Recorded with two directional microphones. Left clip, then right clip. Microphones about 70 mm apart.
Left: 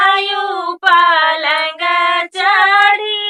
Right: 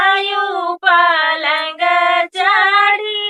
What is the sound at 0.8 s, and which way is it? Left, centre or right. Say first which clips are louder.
Female singing: left 2 dB; left.